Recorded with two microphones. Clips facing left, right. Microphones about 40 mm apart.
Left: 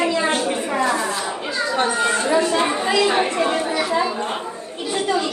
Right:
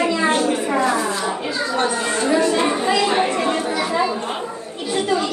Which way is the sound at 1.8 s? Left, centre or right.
Centre.